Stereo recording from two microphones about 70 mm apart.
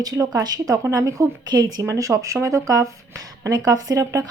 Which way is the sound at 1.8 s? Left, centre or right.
Right.